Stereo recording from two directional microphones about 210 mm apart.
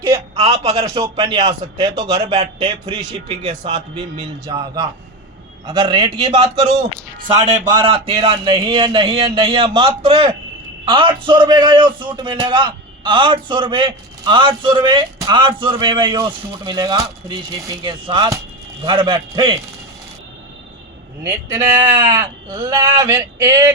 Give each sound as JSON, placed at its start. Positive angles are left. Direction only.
{"t": 0.3, "sound": "a man's voice", "side_deg": -25}
{"t": 0.9, "sound": "a man's voice", "side_deg": -15}
{"t": 2.2, "sound": "a man's voice", "side_deg": -30}
{"t": 21.5, "sound": "a man's voice", "side_deg": -25}